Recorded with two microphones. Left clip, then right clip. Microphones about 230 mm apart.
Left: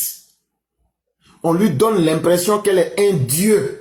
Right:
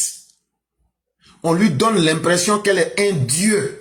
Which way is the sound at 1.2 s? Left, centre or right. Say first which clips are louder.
Left 1 dB; right.